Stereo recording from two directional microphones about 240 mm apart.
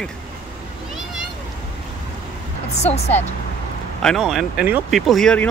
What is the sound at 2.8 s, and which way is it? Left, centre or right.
Speech, left.